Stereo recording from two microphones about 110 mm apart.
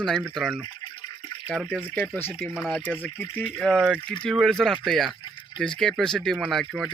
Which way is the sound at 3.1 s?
5° left (ahead or behind).